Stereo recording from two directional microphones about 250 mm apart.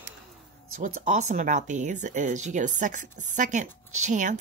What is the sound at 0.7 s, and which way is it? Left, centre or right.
Speech, right.